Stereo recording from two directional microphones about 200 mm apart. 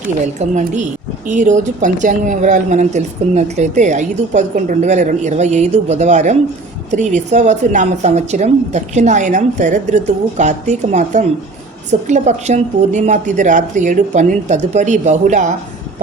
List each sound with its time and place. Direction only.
0.3 s a woman's voice: 35° right (ahead or behind)